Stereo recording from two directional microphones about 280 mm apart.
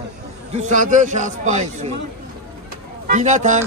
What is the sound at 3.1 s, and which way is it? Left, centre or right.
Speech, right.